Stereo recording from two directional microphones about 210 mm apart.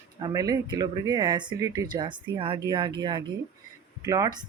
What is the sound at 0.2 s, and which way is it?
Speech, 15° right (ahead or behind).